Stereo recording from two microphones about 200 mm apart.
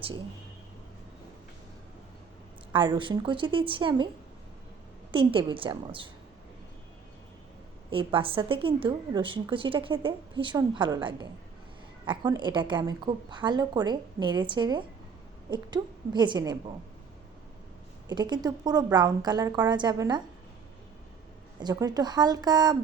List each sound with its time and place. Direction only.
2.7 s a woman's voice: 25° right (ahead or behind)
5.1 s a woman's voice: 25° right (ahead or behind)
7.9 s a woman's voice: 25° right (ahead or behind)
18.1 s a woman's voice: 20° right (ahead or behind)
21.6 s a woman's voice: 20° right (ahead or behind)